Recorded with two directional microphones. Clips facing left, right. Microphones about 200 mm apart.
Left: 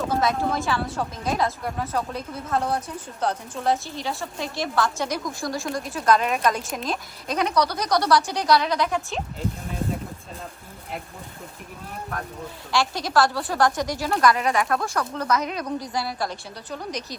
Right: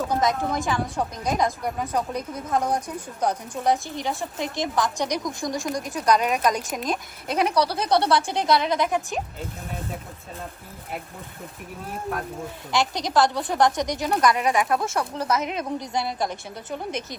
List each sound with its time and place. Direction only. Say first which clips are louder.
0.1 s speech: left 1 dB; 15° right (ahead or behind)
6.1 s speech: even; centre (ahead or behind)
7.5 s a woman's voice: even; 30° right (ahead or behind)
12.7 s a woman's voice: even; 20° right (ahead or behind)
14.0 s speech: left 1 dB; centre (ahead or behind)
14.8 s a woman's voice: right 1 dB; 25° right (ahead or behind)